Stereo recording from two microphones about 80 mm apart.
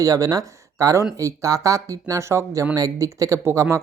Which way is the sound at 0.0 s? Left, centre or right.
Right.